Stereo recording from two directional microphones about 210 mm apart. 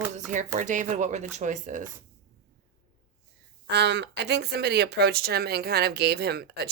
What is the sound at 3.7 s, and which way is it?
A woman's voice, 55° right (ahead or behind).